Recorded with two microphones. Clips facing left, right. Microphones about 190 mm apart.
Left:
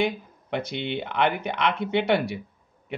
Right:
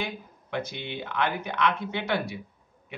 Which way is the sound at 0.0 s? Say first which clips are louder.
Left 9 dB; 65° left (ahead or behind).